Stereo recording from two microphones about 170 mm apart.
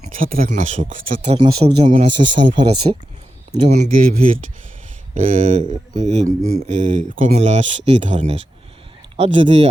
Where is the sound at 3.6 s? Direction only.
45° right (ahead or behind).